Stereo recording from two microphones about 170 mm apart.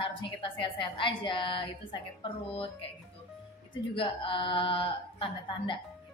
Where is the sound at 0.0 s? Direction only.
30° left (ahead or behind).